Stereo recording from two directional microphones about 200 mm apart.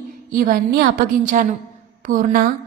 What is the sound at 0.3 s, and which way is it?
A woman's voice, 45° right (ahead or behind).